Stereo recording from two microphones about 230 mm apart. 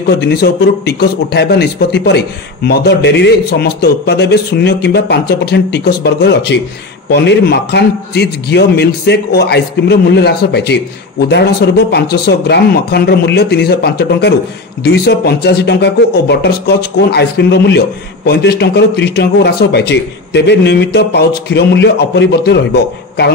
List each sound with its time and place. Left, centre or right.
0.2 s speech: left